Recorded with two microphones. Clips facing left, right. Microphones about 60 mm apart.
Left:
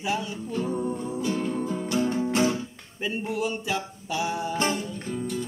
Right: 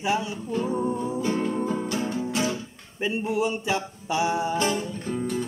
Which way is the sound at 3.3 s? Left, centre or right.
Centre.